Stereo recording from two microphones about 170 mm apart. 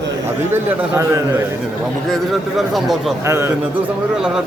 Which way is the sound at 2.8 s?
Centre (ahead or behind).